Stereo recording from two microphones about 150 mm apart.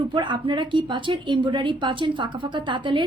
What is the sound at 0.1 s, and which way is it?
A woman's voice, 30° right (ahead or behind).